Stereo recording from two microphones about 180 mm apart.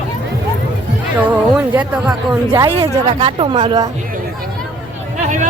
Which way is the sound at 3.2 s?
30° right (ahead or behind).